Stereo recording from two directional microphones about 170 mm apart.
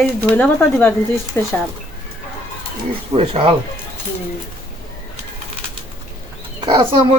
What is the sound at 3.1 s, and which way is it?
Speech, 35° right (ahead or behind).